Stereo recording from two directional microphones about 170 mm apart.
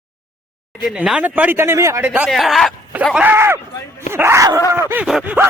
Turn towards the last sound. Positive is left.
turn(degrees=-10)  # may be behind; listen again after turning